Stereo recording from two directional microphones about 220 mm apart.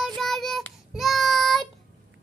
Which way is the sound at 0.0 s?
Centre (ahead or behind).